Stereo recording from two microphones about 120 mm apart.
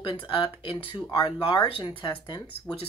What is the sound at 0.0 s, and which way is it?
Speech, 45° left (ahead or behind).